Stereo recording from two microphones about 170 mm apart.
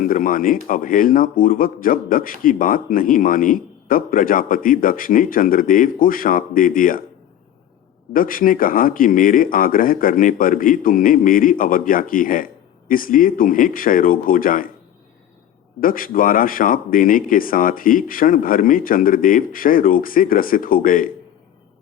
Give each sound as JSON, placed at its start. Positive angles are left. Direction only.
{"t": 0.0, "sound": "a man's voice", "side_deg": 55}
{"t": 8.1, "sound": "a man's voice", "side_deg": 55}
{"t": 15.8, "sound": "a man's voice", "side_deg": 55}